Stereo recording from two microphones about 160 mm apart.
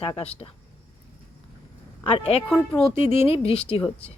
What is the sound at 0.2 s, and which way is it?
Speech, 40° left (ahead or behind).